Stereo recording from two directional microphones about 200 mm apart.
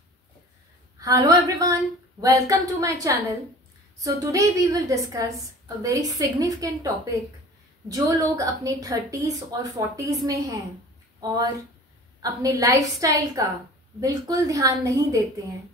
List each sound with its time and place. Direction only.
1.0 s a woman's voice: 15° right (ahead or behind)
7.9 s a woman's voice: 15° right (ahead or behind)